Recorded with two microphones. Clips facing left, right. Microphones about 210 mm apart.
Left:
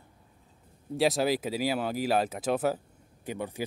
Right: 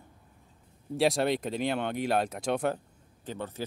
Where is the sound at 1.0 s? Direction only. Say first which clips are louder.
Even; centre (ahead or behind).